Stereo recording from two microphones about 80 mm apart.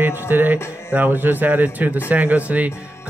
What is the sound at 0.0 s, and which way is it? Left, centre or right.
Speech, right.